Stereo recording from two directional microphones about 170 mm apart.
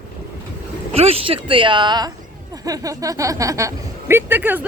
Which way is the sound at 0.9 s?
35° right (ahead or behind).